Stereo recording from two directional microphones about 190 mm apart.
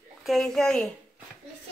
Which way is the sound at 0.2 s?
Centre (ahead or behind).